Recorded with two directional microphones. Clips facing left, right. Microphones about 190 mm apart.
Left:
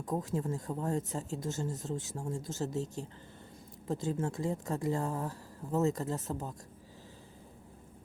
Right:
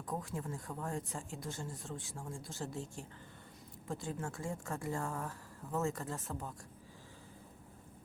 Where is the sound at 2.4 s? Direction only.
40° left (ahead or behind).